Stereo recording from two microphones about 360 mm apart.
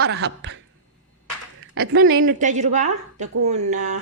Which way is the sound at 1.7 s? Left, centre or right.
Right.